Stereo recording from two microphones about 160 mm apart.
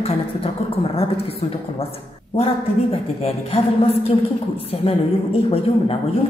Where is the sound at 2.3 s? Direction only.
40° left (ahead or behind).